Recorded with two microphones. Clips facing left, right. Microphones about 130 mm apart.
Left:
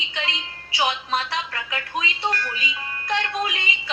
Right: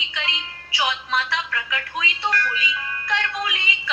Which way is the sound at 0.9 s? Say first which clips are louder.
Right 2 dB; 40° left (ahead or behind).